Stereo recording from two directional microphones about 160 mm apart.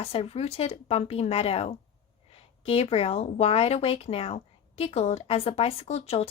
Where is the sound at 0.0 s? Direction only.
35° left (ahead or behind).